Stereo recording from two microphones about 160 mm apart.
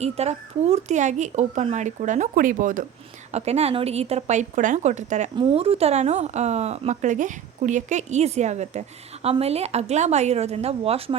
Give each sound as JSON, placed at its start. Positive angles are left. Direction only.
{"t": 0.0, "sound": "a woman's voice", "side_deg": -40}
{"t": 3.3, "sound": "a woman's voice", "side_deg": -40}
{"t": 5.4, "sound": "a woman's voice", "side_deg": -40}